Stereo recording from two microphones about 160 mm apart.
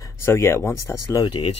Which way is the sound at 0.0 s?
15° left (ahead or behind).